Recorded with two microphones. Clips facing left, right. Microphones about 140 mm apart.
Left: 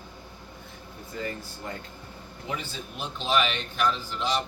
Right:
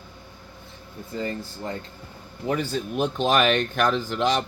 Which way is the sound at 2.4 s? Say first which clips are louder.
Right 10 dB; 45° right (ahead or behind).